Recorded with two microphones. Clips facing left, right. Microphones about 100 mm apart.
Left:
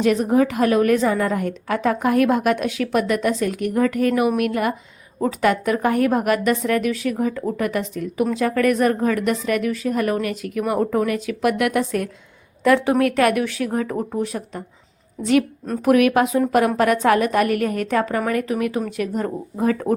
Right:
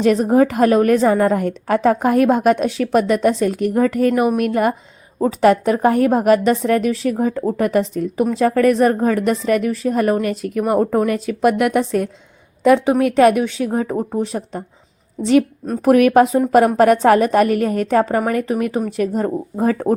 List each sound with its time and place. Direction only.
0.0 s a woman's voice: 35° right (ahead or behind)